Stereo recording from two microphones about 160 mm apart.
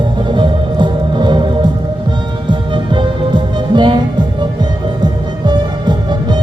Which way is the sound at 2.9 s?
30° right (ahead or behind).